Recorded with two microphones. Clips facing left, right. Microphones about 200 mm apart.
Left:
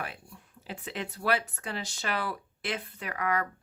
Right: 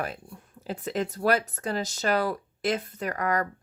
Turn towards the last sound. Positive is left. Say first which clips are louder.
# right 4 dB
turn(degrees=-40)  # may be behind; listen again after turning